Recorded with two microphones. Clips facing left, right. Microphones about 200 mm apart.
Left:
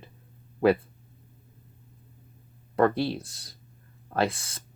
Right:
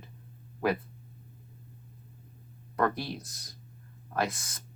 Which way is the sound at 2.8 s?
30° left (ahead or behind).